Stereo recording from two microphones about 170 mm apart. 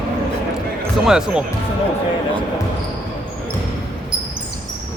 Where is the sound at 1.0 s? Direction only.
5° right (ahead or behind).